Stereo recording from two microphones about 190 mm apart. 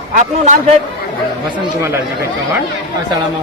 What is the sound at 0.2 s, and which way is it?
Speech, 35° right (ahead or behind).